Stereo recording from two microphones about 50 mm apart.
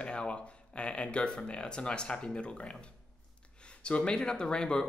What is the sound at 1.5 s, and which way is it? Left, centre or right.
A man's voice, centre.